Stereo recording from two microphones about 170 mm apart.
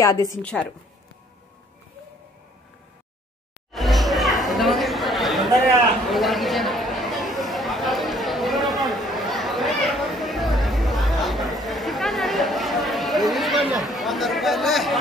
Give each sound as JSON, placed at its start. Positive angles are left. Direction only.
{"t": 0.0, "sound": "a woman's voice", "side_deg": 20}
{"t": 0.4, "sound": "a woman's voice", "side_deg": 5}
{"t": 3.7, "sound": "chatter", "side_deg": 0}